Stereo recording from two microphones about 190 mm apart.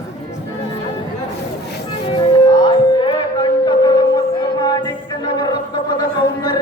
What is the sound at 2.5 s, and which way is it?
Music, 25° left (ahead or behind).